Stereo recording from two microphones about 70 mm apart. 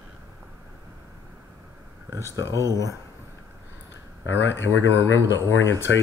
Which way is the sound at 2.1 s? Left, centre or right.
Right.